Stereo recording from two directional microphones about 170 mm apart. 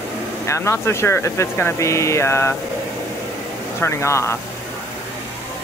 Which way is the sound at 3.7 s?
15° left (ahead or behind).